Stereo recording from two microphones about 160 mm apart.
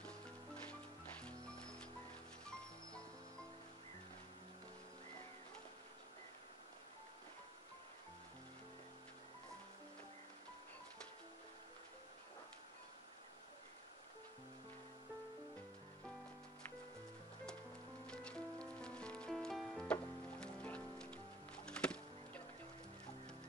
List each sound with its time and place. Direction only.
0.7 s music: 5° left (ahead or behind)
18.0 s music: 5° left (ahead or behind)